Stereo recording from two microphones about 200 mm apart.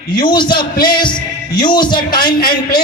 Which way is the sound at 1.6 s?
20° left (ahead or behind).